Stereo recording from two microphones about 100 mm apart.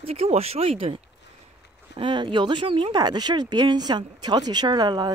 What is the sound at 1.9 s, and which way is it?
Speech, 55° right (ahead or behind).